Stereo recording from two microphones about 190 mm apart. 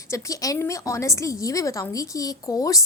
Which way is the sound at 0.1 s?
15° left (ahead or behind).